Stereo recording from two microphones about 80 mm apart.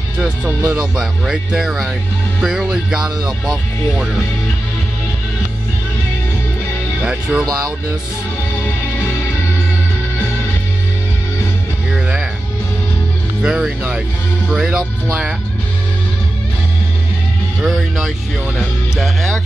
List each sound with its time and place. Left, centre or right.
0.7 s speech: centre
7.0 s speech: centre
11.9 s music: centre
13.4 s speech: centre
17.6 s speech: centre